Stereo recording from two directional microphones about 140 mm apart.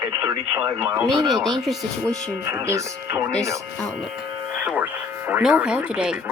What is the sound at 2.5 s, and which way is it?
Speech, 20° right (ahead or behind).